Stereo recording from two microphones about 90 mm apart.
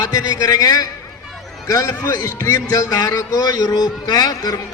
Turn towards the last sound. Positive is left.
turn(degrees=45)  # may be behind; listen again after turning